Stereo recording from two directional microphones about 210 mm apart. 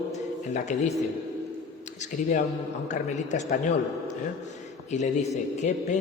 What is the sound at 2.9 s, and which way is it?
Speech, 35° left (ahead or behind).